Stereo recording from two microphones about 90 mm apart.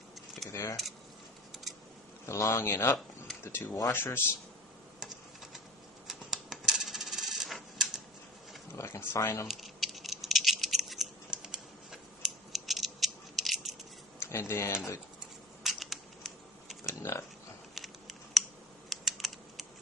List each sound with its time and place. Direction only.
0.5 s speech: 35° left (ahead or behind)
2.2 s speech: 35° left (ahead or behind)
4.9 s tick-tock: 5° right (ahead or behind)
6.1 s coin: 5° right (ahead or behind)
8.7 s speech: 30° left (ahead or behind)
9.5 s rattle: centre (ahead or behind)
14.2 s speech: 30° left (ahead or behind)
15.6 s a sound: centre (ahead or behind)
17.0 s speech: 35° left (ahead or behind)
17.7 s a sound: centre (ahead or behind)
18.9 s computer keyboard: centre (ahead or behind)